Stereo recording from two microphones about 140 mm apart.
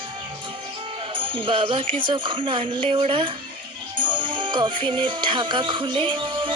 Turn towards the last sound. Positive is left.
turn(degrees=-35)  # may be behind; listen again after turning